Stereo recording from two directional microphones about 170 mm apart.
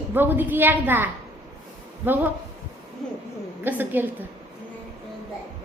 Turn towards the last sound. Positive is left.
turn(degrees=-10)  # may be behind; listen again after turning